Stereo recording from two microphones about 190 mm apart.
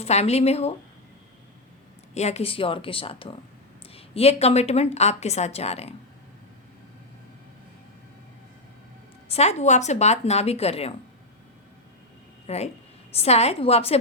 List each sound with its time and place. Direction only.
0.0 s a woman's voice: 35° left (ahead or behind)
2.1 s a woman's voice: 35° left (ahead or behind)
9.3 s a woman's voice: 35° left (ahead or behind)
12.5 s a woman's voice: 35° left (ahead or behind)